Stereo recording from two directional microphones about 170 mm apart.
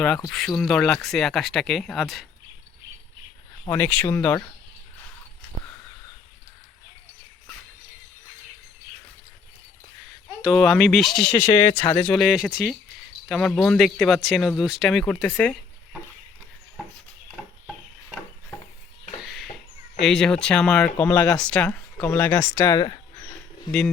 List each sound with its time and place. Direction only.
0.3 s speech: centre (ahead or behind)
3.7 s speech: 10° left (ahead or behind)
10.4 s speech: centre (ahead or behind)
11.3 s speech: 15° left (ahead or behind)
12.0 s speech: centre (ahead or behind)
19.2 s a sound: centre (ahead or behind)
20.0 s speech: 5° left (ahead or behind); by 23.0 s 25° left (ahead or behind)